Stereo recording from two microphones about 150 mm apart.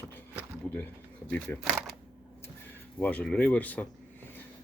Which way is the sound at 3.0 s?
10° left (ahead or behind).